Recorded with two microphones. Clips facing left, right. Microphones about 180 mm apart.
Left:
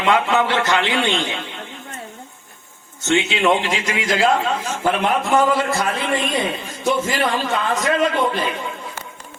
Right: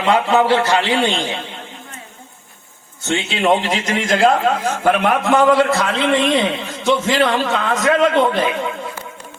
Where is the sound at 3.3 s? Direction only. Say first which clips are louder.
Right 2 dB; 40° right (ahead or behind); by 8.7 s 65° right (ahead or behind).